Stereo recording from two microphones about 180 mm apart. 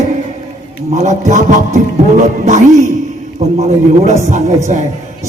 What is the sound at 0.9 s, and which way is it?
A man's voice, 40° right (ahead or behind).